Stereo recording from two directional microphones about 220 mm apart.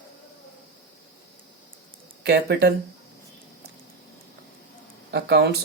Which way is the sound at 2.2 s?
50° right (ahead or behind).